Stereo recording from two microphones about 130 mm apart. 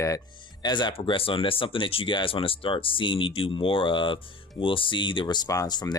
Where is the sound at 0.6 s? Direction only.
35° left (ahead or behind).